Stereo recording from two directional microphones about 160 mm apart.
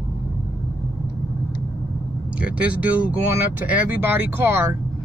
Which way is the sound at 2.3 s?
10° right (ahead or behind).